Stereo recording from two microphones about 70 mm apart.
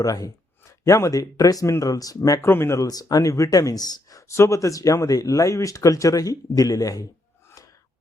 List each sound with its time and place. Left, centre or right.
0.0 s speech: left
0.9 s speech: left
2.4 s speech: left
2.8 s speech: left
4.3 s speech: left